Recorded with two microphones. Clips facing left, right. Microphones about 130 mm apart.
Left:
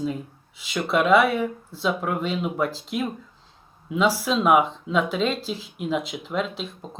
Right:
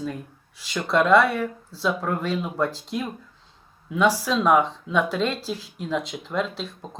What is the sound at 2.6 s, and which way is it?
Speech, centre (ahead or behind).